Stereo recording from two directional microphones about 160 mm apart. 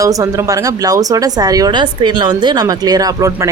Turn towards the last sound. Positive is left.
turn(degrees=-20)  # may be behind; listen again after turning